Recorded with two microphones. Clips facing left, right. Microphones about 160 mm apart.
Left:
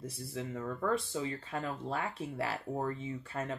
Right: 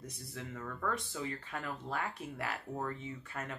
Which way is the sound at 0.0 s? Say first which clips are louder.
Left 6 dB; 30° left (ahead or behind).